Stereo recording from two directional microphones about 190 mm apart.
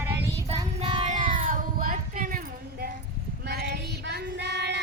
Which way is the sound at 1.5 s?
45° right (ahead or behind).